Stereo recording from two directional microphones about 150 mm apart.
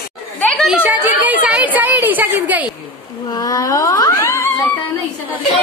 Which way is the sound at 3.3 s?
25° left (ahead or behind).